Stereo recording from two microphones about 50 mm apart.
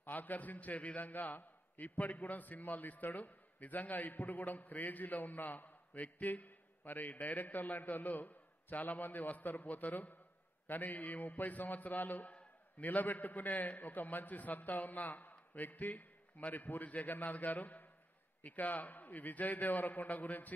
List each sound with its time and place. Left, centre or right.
0.0 s a man's voice: left